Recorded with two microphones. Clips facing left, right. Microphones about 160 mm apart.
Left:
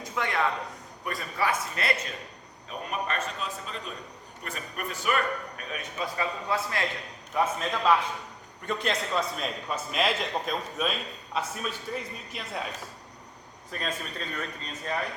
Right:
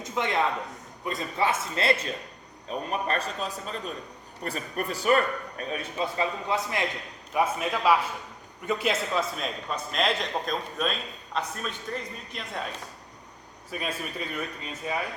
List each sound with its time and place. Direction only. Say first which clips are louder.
0.0 s a man's voice: right 2 dB; 20° right (ahead or behind); by 12.6 s 5° left (ahead or behind)
13.7 s speech: right 1 dB; 10° right (ahead or behind)